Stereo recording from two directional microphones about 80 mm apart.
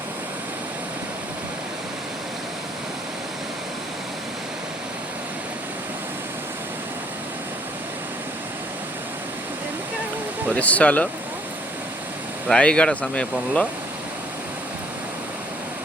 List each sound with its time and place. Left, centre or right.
10.5 s speech: centre
12.5 s speech: centre